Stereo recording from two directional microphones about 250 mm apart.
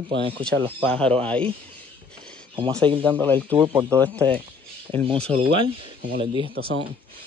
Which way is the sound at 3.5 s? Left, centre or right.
Centre.